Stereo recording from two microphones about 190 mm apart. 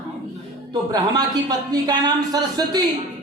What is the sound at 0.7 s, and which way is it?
Speech, 20° right (ahead or behind).